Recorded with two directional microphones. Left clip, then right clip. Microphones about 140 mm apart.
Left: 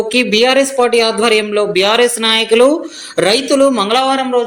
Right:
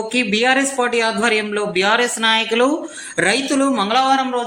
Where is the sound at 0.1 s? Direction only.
25° left (ahead or behind).